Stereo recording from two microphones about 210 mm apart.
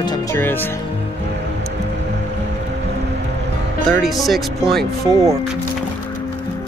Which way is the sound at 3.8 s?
Centre (ahead or behind).